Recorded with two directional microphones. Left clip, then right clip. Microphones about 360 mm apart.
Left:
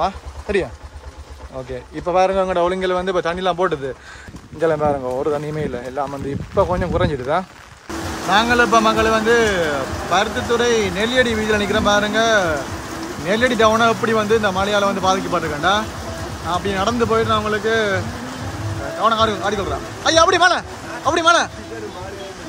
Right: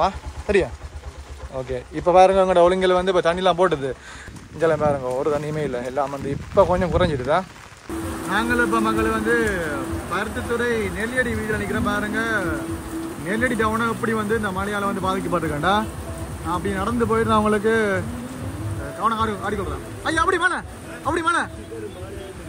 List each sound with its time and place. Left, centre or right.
0.0 s speech: centre
2.0 s speech: centre
11.0 s speech: left
11.7 s speech: centre
19.0 s speech: centre